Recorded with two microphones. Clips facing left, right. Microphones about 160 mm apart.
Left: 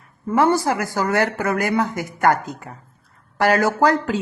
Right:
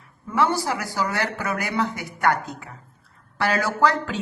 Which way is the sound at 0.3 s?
50° left (ahead or behind).